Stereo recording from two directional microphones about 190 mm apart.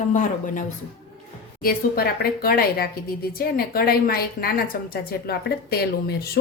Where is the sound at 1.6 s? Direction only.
50° left (ahead or behind).